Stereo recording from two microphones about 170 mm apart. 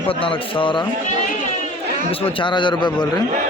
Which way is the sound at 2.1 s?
35° left (ahead or behind).